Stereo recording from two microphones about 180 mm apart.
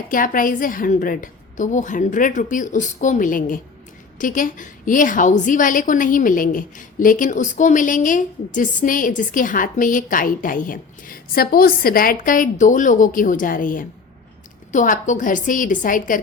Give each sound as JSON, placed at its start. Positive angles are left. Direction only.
{"t": 0.1, "sound": "a woman's voice", "side_deg": 50}